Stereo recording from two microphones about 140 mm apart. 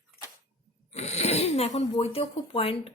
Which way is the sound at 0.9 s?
50° left (ahead or behind).